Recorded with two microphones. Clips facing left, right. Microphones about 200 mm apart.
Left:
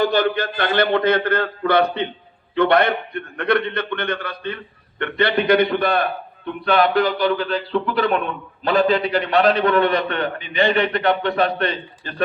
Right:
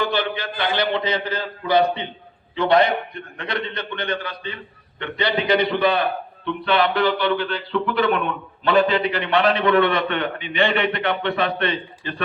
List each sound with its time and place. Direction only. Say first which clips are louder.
0.0 s a man's voice: left 5 dB; 45° left (ahead or behind)